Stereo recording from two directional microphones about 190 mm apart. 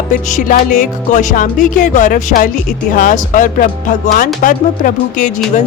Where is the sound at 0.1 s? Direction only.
40° left (ahead or behind).